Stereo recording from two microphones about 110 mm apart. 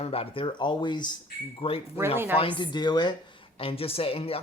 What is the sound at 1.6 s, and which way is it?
Speech, 60° left (ahead or behind).